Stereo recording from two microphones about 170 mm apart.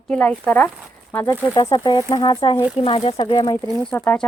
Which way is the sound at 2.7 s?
35° left (ahead or behind).